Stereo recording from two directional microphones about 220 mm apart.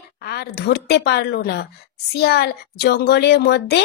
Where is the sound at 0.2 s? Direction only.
45° left (ahead or behind).